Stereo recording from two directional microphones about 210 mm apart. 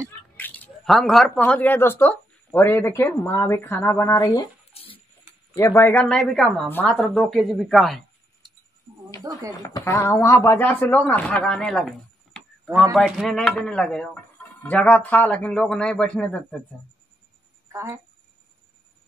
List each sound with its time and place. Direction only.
0.4 s speech: 5° left (ahead or behind); by 5.0 s 25° left (ahead or behind)
5.5 s speech: 15° left (ahead or behind)
9.2 s speech: 15° right (ahead or behind)
9.6 s a man's voice: 15° left (ahead or behind)